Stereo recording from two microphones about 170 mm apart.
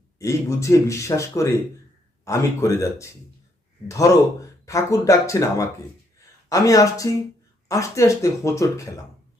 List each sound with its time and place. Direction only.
0.2 s speech: 15° left (ahead or behind)
6.1 s a sound: 20° left (ahead or behind)
7.7 s speech: 20° left (ahead or behind)